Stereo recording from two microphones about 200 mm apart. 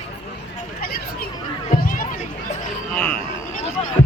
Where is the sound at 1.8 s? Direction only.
45° left (ahead or behind).